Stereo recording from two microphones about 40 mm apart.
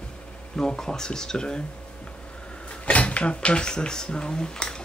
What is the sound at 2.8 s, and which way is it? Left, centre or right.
Drawer open or close, left.